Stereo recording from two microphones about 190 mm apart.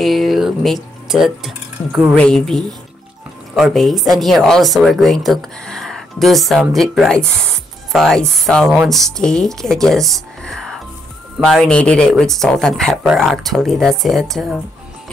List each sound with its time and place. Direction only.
0.0 s a woman's voice: centre (ahead or behind)